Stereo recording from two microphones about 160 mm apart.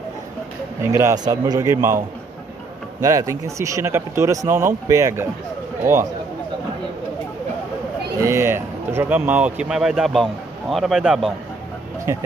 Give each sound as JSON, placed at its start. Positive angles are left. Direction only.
{"t": 0.8, "sound": "a man's voice", "side_deg": -15}
{"t": 3.0, "sound": "speech", "side_deg": -20}
{"t": 8.2, "sound": "speech", "side_deg": -15}